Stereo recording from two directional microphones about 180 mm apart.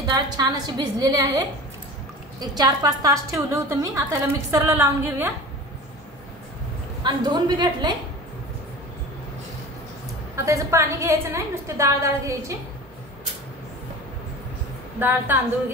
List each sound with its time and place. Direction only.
0.0 s a woman's voice: 20° right (ahead or behind)
2.5 s a woman's voice: 20° right (ahead or behind)
7.0 s a woman's voice: 25° right (ahead or behind)
10.3 s a woman's voice: 15° right (ahead or behind)
15.0 s a woman's voice: 10° right (ahead or behind)